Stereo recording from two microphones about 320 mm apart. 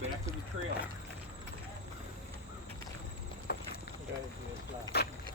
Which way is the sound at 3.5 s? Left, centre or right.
Left.